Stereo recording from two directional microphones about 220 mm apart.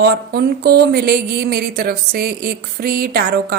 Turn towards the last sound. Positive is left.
turn(degrees=-45)  # may be behind; listen again after turning